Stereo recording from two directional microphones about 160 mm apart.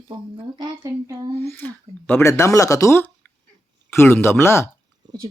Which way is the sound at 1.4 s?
15° left (ahead or behind).